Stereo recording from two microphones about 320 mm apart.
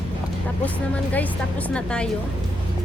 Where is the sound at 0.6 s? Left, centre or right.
Centre.